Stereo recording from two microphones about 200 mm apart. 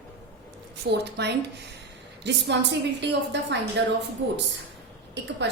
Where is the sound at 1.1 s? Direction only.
55° right (ahead or behind).